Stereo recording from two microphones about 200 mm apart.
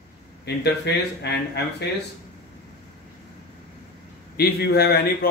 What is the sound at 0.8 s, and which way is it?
Speech, 60° left (ahead or behind).